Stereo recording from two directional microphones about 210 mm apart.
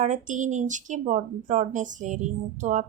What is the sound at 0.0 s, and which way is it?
Speech, 35° right (ahead or behind).